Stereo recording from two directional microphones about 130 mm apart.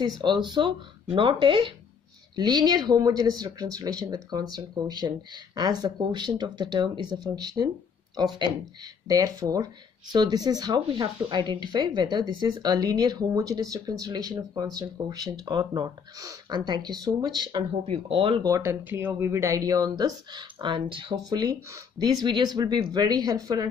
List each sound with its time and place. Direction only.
0.0 s speech: 35° right (ahead or behind)
9.0 s speech: 25° right (ahead or behind)
17.8 s speech: 45° right (ahead or behind)
18.4 s speech: 20° right (ahead or behind); by 21.2 s 40° right (ahead or behind)
21.3 s speech: 30° right (ahead or behind)